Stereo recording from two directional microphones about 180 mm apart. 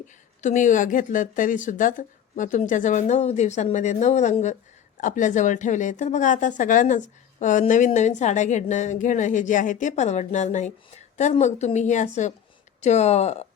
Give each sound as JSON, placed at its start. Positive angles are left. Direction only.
{"t": 0.4, "sound": "a woman's voice", "side_deg": 45}